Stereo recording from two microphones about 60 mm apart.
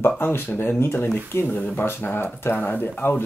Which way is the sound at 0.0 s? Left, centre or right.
Left.